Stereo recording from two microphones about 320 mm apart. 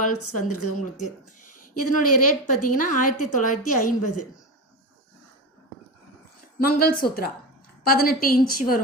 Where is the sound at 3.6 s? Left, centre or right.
Left.